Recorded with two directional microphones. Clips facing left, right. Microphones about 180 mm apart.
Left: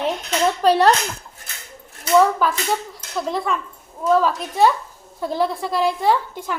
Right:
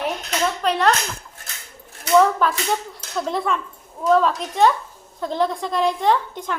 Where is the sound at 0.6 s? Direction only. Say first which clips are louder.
Left 5 dB; 35° left (ahead or behind).